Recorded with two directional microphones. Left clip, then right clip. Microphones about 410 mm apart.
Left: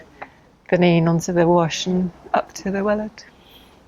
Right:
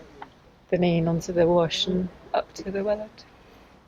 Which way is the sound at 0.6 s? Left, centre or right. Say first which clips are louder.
Left 7 dB; left.